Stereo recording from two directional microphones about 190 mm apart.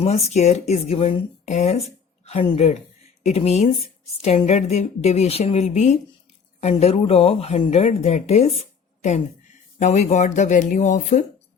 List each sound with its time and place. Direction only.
0.0 s speech: 35° left (ahead or behind)
9.0 s a sound: 40° left (ahead or behind)
9.8 s speech: 35° left (ahead or behind)